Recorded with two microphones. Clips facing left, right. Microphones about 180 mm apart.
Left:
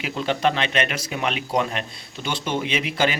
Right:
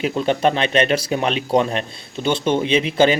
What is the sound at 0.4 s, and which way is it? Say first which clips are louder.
Speech: right 4 dB; 30° right (ahead or behind).